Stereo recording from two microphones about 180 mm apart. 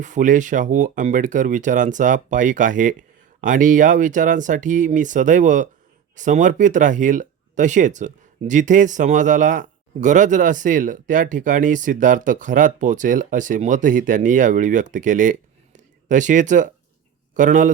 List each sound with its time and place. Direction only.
0.0 s speech: 45° right (ahead or behind)